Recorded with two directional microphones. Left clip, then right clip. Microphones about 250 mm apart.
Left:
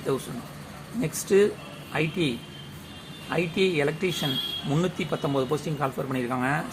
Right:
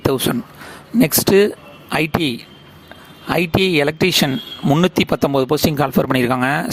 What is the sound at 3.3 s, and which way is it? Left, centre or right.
Speech, right.